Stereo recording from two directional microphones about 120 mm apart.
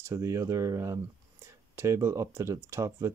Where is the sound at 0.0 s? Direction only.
25° right (ahead or behind).